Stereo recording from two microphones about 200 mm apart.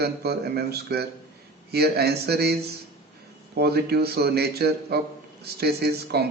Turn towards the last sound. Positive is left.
turn(degrees=-55)  # may be behind; listen again after turning